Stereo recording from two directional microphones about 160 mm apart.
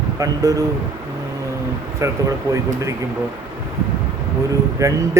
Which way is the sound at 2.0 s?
20° right (ahead or behind).